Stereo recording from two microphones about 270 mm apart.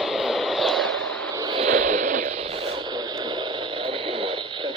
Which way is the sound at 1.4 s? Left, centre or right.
Centre.